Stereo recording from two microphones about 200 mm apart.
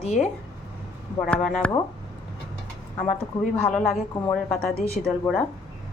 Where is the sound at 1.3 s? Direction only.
Centre (ahead or behind).